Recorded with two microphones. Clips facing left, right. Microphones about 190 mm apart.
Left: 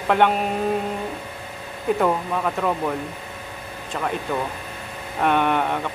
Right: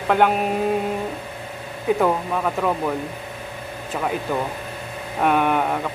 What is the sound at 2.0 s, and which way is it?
Speech, centre (ahead or behind).